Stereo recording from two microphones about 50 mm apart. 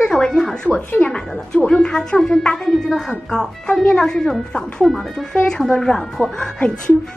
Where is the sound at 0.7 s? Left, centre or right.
Left.